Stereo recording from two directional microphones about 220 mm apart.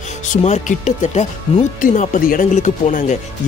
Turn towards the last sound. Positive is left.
turn(degrees=35)  # may be behind; listen again after turning